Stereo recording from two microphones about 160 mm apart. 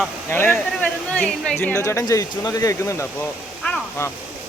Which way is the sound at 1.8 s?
20° left (ahead or behind).